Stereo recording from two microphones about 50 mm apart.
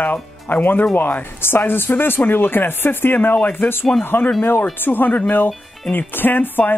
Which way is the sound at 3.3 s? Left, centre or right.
Left.